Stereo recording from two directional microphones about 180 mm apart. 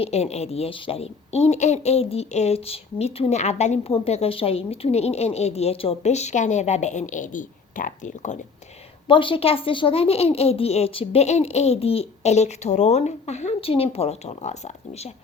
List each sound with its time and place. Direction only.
0.0 s a woman's voice: 35° left (ahead or behind)
9.0 s a woman's voice: 30° left (ahead or behind)